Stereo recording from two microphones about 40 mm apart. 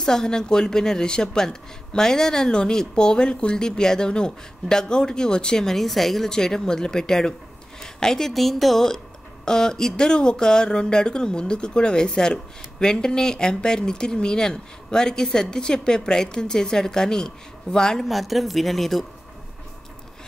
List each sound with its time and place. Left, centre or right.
0.0 s speech: centre
5.7 s speech: centre
6.2 s speech: centre
7.8 s a sound: centre
8.3 s speech: centre
18.0 s speech: centre